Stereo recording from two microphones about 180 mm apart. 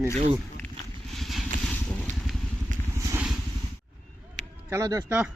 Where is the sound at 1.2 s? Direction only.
Centre (ahead or behind).